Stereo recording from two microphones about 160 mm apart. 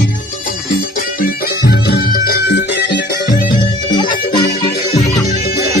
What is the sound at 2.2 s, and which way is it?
Music, 75° left (ahead or behind).